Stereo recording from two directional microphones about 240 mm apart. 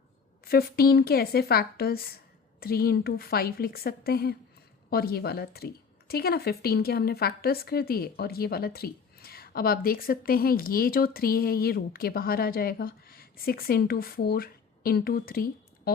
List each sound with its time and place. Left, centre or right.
0.4 s speech: left